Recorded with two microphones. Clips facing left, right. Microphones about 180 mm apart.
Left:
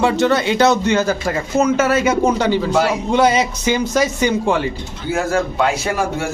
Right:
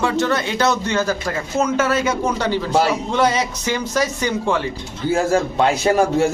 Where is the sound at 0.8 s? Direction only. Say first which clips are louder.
Left 4 dB; 15° left (ahead or behind).